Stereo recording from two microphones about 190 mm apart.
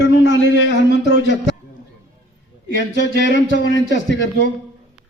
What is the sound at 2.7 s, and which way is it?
A man's voice, 75° left (ahead or behind).